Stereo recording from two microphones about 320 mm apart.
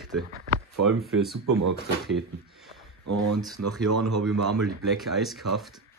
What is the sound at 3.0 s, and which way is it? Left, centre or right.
Speech, right.